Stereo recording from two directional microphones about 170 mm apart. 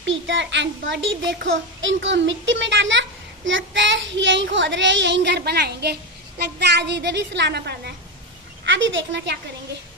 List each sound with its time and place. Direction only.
0.0 s a child's voice: 90° right
8.6 s a child's voice: 90° right